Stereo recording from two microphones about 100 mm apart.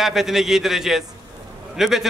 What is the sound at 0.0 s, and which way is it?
A man's voice, 5° right (ahead or behind).